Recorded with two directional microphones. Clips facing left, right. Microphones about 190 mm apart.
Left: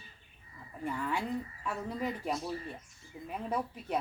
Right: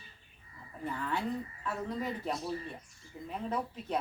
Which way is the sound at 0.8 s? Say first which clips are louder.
Left 1 dB; 10° left (ahead or behind).